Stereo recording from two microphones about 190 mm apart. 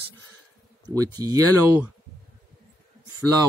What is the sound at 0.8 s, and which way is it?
Speech, 20° right (ahead or behind).